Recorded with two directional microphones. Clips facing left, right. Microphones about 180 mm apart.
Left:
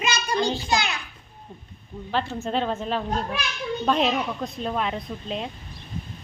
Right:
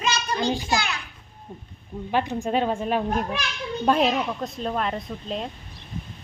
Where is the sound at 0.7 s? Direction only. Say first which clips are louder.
Left 1 dB; 20° left (ahead or behind).